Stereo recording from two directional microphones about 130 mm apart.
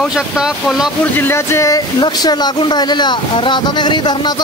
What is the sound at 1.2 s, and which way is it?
Speech, 20° left (ahead or behind).